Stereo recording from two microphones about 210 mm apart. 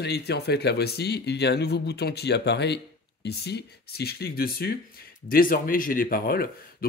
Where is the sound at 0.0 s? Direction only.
50° left (ahead or behind).